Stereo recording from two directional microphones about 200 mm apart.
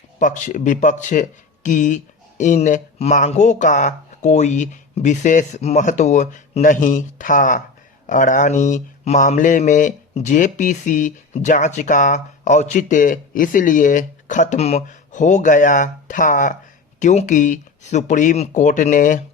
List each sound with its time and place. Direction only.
0.2 s speech: 40° left (ahead or behind)